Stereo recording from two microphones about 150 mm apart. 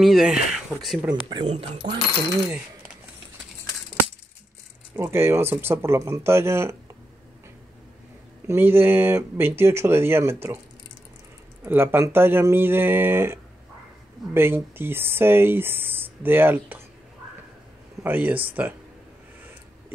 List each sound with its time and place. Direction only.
0.0 s speech: 5° right (ahead or behind)
1.4 s speech: 40° right (ahead or behind)
4.9 s speech: 15° right (ahead or behind)
8.5 s speech: 15° right (ahead or behind)
11.6 s speech: 15° right (ahead or behind)
18.0 s speech: 10° right (ahead or behind)